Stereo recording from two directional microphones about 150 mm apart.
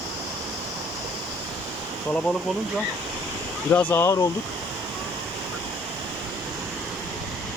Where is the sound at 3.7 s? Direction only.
15° left (ahead or behind).